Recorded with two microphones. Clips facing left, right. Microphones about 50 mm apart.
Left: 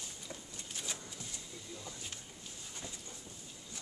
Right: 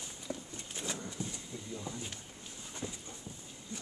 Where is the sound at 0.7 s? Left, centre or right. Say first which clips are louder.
Right 6 dB; right.